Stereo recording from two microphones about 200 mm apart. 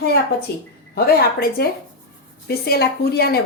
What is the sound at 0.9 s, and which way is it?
A woman's voice, 50° left (ahead or behind).